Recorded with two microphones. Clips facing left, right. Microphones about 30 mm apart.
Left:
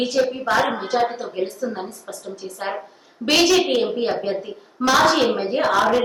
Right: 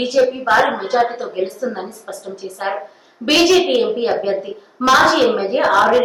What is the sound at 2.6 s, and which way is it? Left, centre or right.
A woman's voice, centre.